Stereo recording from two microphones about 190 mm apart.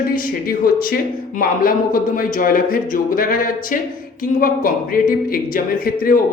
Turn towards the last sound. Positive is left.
turn(degrees=50)  # may be behind; listen again after turning